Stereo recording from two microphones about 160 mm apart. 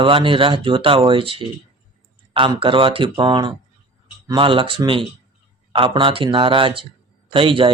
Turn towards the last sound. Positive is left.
turn(degrees=-35)  # may be behind; listen again after turning